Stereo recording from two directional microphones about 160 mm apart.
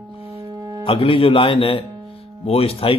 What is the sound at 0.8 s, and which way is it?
Mantra, 35° left (ahead or behind).